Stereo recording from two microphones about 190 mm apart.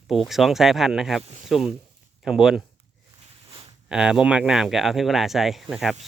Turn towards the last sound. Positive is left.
turn(degrees=0)  # may be behind; listen again after turning